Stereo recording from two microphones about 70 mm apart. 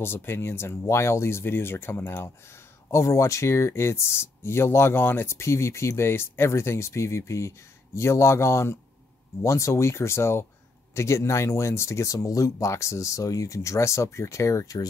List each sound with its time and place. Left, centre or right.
0.0 s speech: left